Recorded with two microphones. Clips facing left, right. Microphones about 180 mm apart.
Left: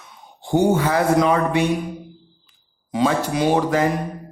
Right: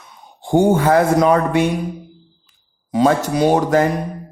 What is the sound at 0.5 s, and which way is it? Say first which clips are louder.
Speech: right 4 dB; 50° right (ahead or behind).